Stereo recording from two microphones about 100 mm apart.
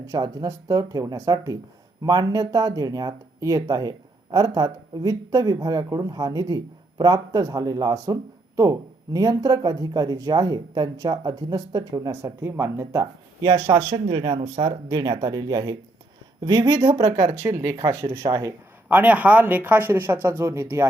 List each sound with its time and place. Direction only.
0.0 s speech: 35° right (ahead or behind)
12.2 s speech: 25° right (ahead or behind)
13.9 s speech: 45° right (ahead or behind)
18.9 s speech: 15° right (ahead or behind)